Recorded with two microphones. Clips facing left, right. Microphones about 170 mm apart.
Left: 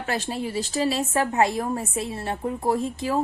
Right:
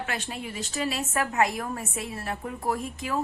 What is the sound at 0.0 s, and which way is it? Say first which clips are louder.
A woman's voice: left 6 dB; 35° left (ahead or behind).